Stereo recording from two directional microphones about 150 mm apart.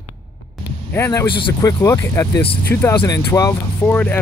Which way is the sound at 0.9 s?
20° left (ahead or behind).